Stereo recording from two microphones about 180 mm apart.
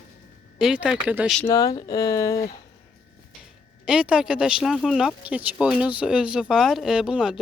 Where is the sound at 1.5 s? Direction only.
20° left (ahead or behind).